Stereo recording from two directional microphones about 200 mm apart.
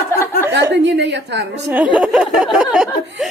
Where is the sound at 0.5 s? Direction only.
60° right (ahead or behind).